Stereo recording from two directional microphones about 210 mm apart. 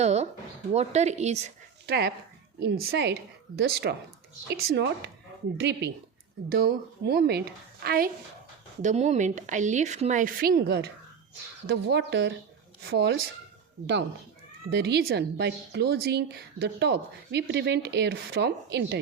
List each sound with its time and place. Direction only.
0.0 s a woman's voice: 30° right (ahead or behind)
1.9 s a woman's voice: 50° right (ahead or behind)
8.8 s a woman's voice: 35° right (ahead or behind); by 13.1 s 55° right (ahead or behind)
14.7 s a woman's voice: 50° right (ahead or behind)